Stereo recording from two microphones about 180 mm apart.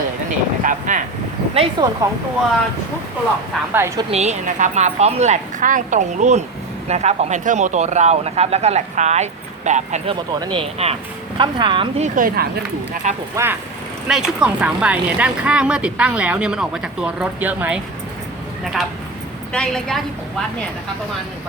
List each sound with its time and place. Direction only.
0.6 s speech: 45° right (ahead or behind)
1.5 s speech: 25° right (ahead or behind)
3.7 s a woman's voice: 15° right (ahead or behind)
4.1 s speech: 40° right (ahead or behind)
10.4 s speech: 30° right (ahead or behind)
12.0 s speech: 50° right (ahead or behind)
13.3 s a woman's voice: 15° right (ahead or behind); by 20.0 s 5° left (ahead or behind)